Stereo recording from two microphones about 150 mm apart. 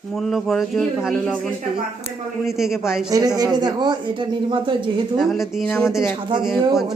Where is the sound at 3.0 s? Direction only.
25° right (ahead or behind).